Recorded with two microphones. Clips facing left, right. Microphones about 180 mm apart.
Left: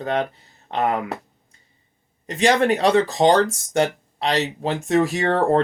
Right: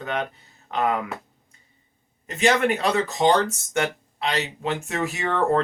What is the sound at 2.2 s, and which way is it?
Speech, 35° left (ahead or behind).